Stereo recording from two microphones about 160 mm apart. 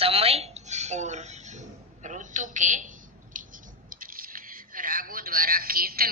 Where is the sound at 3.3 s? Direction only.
55° right (ahead or behind).